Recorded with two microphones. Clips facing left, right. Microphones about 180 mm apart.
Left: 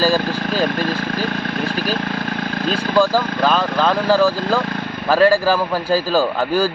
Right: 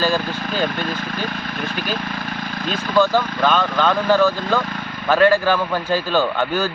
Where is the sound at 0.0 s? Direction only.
35° left (ahead or behind).